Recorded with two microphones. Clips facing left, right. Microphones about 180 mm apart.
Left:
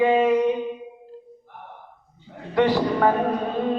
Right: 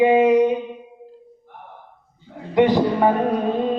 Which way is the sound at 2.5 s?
20° right (ahead or behind).